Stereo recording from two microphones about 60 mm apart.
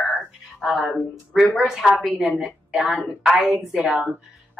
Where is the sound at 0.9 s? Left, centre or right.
Centre.